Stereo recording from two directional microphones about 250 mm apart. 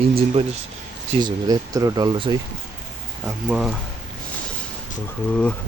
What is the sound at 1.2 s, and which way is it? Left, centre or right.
Speech, centre.